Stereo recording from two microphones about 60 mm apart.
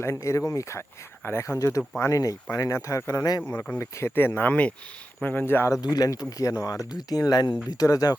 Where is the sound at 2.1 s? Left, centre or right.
Left.